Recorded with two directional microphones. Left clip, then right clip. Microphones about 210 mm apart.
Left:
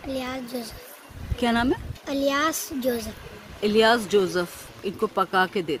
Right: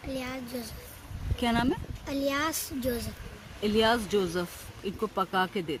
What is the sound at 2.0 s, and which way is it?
Speech, 30° right (ahead or behind).